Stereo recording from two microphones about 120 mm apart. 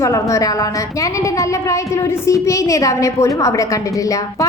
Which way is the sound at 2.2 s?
25° left (ahead or behind).